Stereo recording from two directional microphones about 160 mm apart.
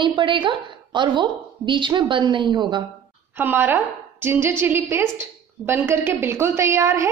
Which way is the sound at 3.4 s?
10° right (ahead or behind).